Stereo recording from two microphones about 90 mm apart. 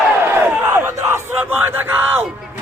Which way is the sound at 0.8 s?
25° right (ahead or behind).